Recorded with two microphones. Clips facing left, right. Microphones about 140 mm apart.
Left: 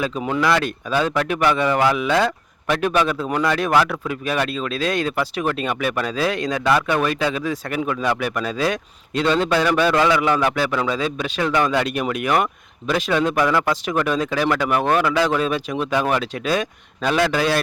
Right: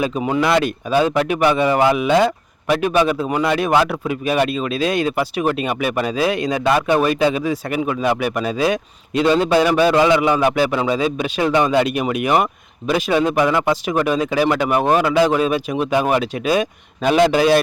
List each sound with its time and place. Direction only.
0.0 s a man's voice: 15° right (ahead or behind)
0.6 s speech: 10° right (ahead or behind)
6.7 s a man's voice: 20° right (ahead or behind)
13.8 s a man's voice: 10° right (ahead or behind)